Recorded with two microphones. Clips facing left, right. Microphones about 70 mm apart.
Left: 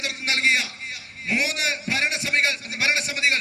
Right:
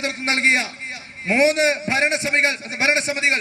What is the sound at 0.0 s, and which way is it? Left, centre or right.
A man's voice, right.